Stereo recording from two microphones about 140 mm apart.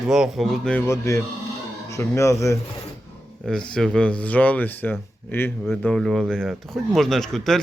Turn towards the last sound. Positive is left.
turn(degrees=5)  # may be behind; listen again after turning